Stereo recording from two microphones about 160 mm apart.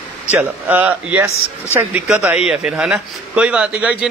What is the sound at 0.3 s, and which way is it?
Speech, 10° right (ahead or behind).